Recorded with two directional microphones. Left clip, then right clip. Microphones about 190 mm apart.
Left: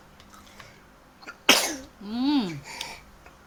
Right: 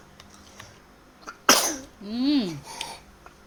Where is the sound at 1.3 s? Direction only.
5° right (ahead or behind).